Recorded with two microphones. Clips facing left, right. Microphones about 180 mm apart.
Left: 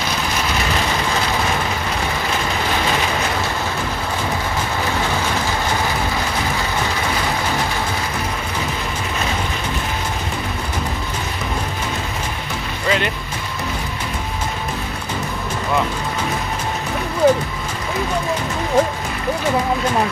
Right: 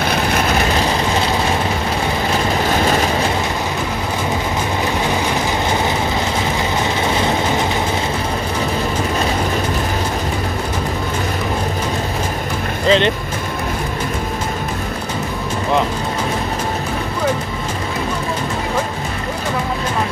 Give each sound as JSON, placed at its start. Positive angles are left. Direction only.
{"t": 12.8, "sound": "music", "side_deg": -25}